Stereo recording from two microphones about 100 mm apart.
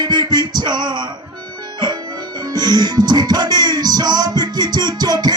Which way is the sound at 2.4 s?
40° right (ahead or behind).